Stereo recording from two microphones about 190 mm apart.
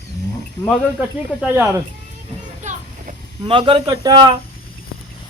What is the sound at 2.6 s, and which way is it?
Children playing, 40° right (ahead or behind).